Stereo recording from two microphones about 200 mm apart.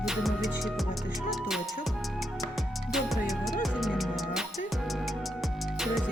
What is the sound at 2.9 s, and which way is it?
Music, centre (ahead or behind).